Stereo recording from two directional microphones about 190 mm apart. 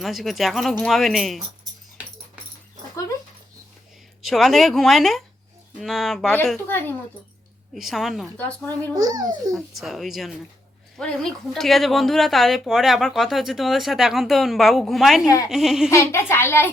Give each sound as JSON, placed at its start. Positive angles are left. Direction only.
{"t": 0.0, "sound": "speech", "side_deg": 0}
{"t": 4.2, "sound": "speech", "side_deg": 0}
{"t": 7.7, "sound": "speech", "side_deg": 0}
{"t": 8.4, "sound": "a child's voice", "side_deg": 10}
{"t": 9.0, "sound": "a child's voice", "side_deg": -20}
{"t": 9.6, "sound": "speech", "side_deg": 0}
{"t": 15.9, "sound": "a child's voice", "side_deg": 15}